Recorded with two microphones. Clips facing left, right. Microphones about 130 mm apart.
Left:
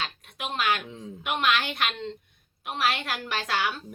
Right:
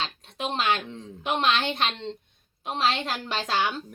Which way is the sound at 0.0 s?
30° right (ahead or behind).